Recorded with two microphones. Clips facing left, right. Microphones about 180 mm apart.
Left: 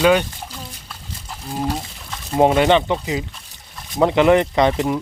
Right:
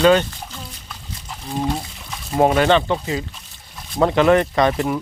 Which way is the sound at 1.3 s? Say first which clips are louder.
Right 1 dB; 5° left (ahead or behind).